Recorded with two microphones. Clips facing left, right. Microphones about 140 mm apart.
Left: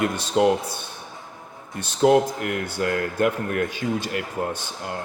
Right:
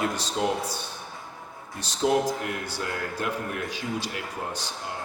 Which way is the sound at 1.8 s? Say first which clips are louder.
Left 6 dB; 55° left (ahead or behind).